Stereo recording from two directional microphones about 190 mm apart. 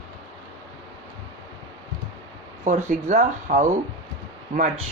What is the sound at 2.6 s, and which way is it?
Speech, 40° right (ahead or behind).